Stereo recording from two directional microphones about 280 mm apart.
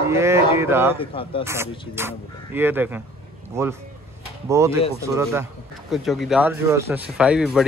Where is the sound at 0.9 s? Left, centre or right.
Centre.